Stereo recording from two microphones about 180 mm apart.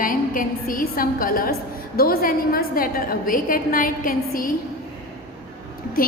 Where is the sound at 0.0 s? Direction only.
50° left (ahead or behind).